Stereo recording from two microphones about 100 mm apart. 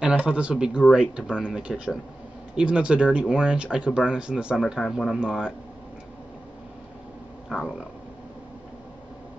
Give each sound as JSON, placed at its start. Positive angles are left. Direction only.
{"t": 0.0, "sound": "speech", "side_deg": -10}